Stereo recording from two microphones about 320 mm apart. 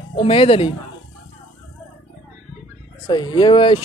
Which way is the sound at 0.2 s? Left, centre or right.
Centre.